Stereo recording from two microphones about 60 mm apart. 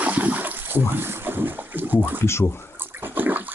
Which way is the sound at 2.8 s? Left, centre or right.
Right.